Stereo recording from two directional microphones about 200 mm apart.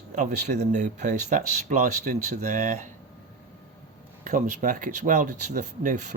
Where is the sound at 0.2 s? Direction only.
35° right (ahead or behind).